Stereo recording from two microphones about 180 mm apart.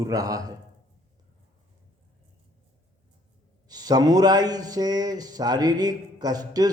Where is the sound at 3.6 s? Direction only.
20° right (ahead or behind).